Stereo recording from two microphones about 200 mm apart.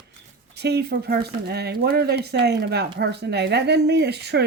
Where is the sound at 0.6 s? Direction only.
55° right (ahead or behind).